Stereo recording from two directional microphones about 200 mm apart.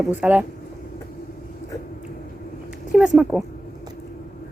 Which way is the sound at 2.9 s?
5° right (ahead or behind).